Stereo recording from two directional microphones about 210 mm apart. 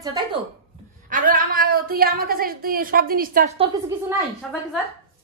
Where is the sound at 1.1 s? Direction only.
40° right (ahead or behind).